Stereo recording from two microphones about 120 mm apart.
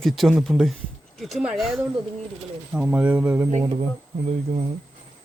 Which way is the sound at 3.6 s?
50° right (ahead or behind).